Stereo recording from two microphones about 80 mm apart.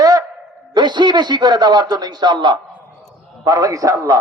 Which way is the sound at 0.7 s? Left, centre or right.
Right.